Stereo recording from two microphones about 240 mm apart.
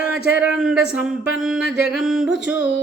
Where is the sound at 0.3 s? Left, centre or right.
Centre.